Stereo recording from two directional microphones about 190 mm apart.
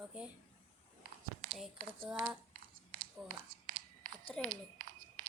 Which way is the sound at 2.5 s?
50° right (ahead or behind).